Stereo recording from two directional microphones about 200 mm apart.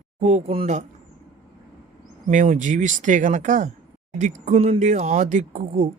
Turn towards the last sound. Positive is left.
turn(degrees=-35)  # may be behind; listen again after turning